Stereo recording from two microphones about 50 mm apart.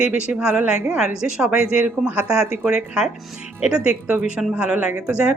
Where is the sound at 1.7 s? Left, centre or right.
Right.